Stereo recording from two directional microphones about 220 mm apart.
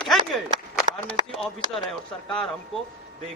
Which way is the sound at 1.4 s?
Centre (ahead or behind).